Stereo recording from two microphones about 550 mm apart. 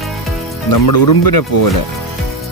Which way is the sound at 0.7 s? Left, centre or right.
Left.